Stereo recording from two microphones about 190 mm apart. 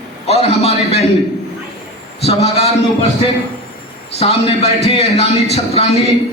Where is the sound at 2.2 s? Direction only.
35° left (ahead or behind).